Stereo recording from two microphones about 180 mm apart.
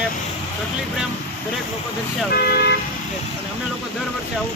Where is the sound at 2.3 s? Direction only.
60° left (ahead or behind).